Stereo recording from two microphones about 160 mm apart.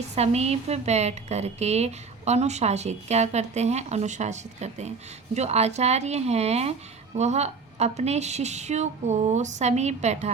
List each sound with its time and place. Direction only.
0.2 s a woman's voice: 40° right (ahead or behind)